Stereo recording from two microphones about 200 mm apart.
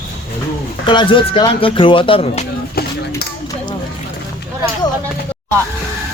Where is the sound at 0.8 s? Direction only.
25° left (ahead or behind).